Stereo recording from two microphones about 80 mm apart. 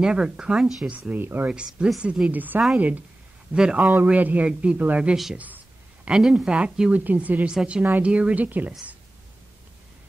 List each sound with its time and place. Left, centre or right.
0.0 s speech: centre
0.8 s speech: centre
1.5 s speech: centre
3.5 s speech: centre
3.9 s speech: right
5.1 s speech: centre